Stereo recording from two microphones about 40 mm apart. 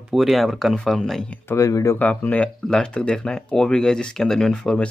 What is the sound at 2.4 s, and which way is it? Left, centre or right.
Speech, left.